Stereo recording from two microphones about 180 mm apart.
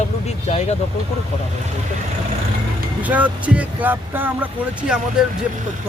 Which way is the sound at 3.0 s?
10° right (ahead or behind).